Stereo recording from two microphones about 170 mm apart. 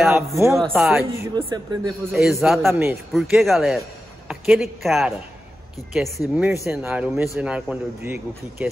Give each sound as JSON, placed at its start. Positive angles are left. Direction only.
{"t": 0.1, "sound": "speech", "side_deg": -15}
{"t": 0.7, "sound": "speech", "side_deg": 0}
{"t": 1.1, "sound": "speech", "side_deg": -20}
{"t": 2.1, "sound": "speech", "side_deg": 0}
{"t": 2.7, "sound": "speech", "side_deg": -15}
{"t": 3.1, "sound": "speech", "side_deg": 0}